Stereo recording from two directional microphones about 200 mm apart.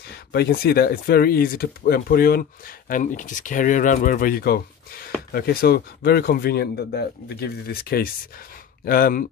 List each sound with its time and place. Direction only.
0.1 s speech: 55° left (ahead or behind)